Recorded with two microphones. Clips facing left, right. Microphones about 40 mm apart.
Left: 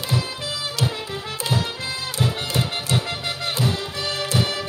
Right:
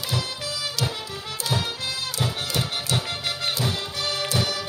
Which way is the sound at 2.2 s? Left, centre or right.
Left.